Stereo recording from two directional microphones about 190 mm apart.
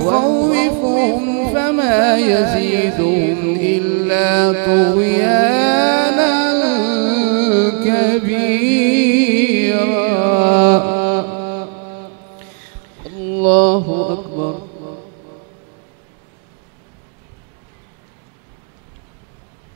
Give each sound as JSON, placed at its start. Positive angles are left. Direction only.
{"t": 0.1, "sound": "music", "side_deg": -15}
{"t": 1.1, "sound": "music", "side_deg": -45}
{"t": 1.4, "sound": "music", "side_deg": -20}
{"t": 3.6, "sound": "mantra", "side_deg": -20}
{"t": 13.4, "sound": "mantra", "side_deg": -20}